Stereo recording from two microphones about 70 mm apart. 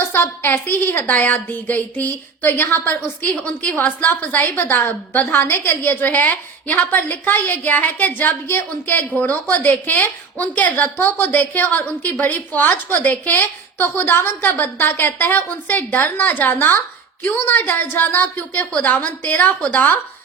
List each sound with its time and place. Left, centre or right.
0.0 s a woman's voice: left